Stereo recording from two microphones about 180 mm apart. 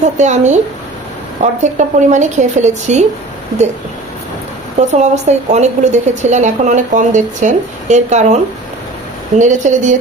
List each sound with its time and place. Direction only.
0.0 s a woman's voice: 40° right (ahead or behind)
4.7 s a woman's voice: 40° right (ahead or behind)
9.4 s a woman's voice: 45° right (ahead or behind)